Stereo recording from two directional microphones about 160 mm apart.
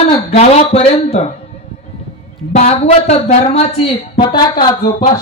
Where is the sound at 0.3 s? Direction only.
40° left (ahead or behind).